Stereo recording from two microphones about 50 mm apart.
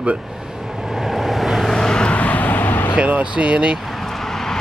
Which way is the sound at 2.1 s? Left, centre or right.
Left.